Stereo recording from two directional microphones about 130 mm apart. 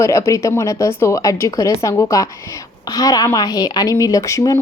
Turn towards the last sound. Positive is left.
turn(degrees=25)  # may be behind; listen again after turning